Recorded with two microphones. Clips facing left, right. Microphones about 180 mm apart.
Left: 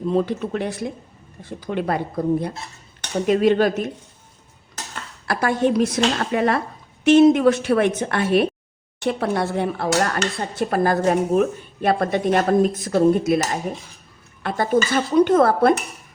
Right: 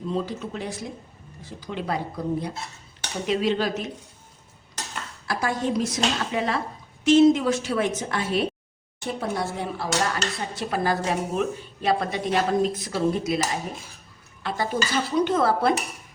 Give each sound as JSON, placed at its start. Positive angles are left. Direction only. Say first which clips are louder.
{"t": 0.1, "sound": "a woman's voice", "louder": "left 7 dB", "side_deg": 60}
{"t": 5.3, "sound": "a woman's voice", "louder": "left 6 dB", "side_deg": 65}